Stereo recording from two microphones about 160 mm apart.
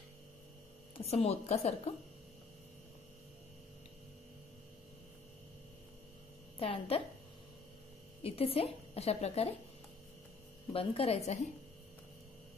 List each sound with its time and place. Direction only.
0.9 s a woman's voice: 40° left (ahead or behind)
6.6 s a woman's voice: 35° left (ahead or behind)
8.2 s a woman's voice: 35° left (ahead or behind)
10.7 s a woman's voice: 35° left (ahead or behind)